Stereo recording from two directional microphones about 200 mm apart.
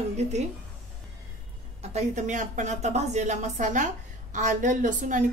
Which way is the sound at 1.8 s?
35° right (ahead or behind).